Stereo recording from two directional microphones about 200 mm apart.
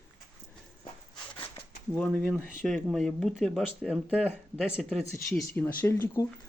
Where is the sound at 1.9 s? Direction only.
5° left (ahead or behind).